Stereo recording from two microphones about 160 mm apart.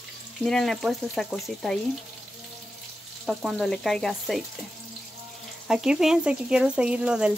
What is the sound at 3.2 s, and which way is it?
Speech, centre (ahead or behind).